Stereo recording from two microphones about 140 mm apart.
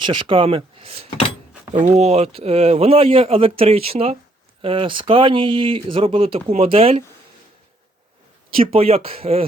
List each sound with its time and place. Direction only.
0.0 s speech: 35° right (ahead or behind)
1.7 s speech: 55° right (ahead or behind)
8.5 s speech: 45° right (ahead or behind)